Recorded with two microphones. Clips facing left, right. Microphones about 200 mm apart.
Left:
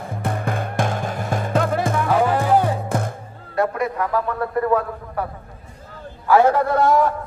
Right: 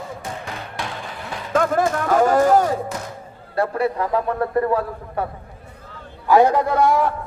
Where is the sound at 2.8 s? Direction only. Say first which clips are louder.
Left 5 dB; 50° left (ahead or behind).